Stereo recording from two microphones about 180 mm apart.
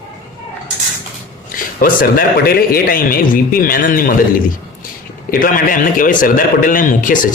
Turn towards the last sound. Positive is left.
turn(degrees=50)  # may be behind; listen again after turning